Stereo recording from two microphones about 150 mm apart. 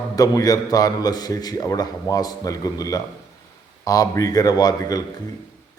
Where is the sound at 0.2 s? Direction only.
25° left (ahead or behind).